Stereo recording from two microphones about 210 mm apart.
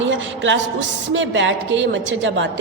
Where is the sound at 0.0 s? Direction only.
60° right (ahead or behind).